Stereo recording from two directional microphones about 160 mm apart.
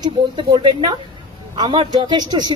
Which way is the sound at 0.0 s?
25° right (ahead or behind).